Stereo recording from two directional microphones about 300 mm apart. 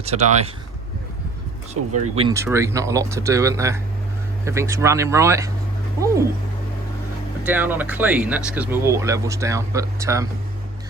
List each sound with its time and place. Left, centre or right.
0.0 s speech: right
1.8 s speech: right
2.1 s speech: centre
7.4 s speech: centre